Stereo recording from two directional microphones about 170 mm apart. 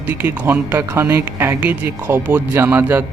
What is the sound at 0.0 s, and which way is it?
A woman's voice, 10° right (ahead or behind).